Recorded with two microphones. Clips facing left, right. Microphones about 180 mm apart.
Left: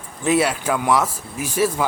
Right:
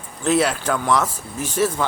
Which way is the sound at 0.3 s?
5° left (ahead or behind).